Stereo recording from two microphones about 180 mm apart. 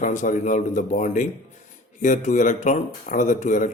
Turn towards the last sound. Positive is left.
turn(degrees=45)  # may be behind; listen again after turning